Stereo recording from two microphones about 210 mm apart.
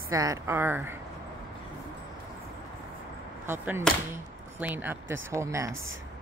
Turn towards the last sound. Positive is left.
turn(degrees=-15)  # may be behind; listen again after turning